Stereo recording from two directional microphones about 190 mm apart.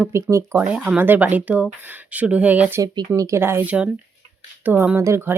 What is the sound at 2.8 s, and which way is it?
A woman's voice, 20° right (ahead or behind).